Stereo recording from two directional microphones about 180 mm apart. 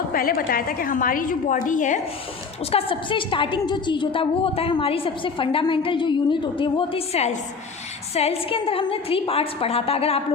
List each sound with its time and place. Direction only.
0.1 s a woman's voice: 55° left (ahead or behind)
2.7 s a woman's voice: 30° left (ahead or behind)